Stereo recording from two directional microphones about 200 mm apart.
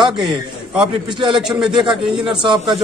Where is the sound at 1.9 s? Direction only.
5° right (ahead or behind).